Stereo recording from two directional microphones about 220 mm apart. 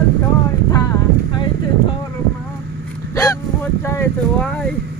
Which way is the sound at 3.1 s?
15° left (ahead or behind).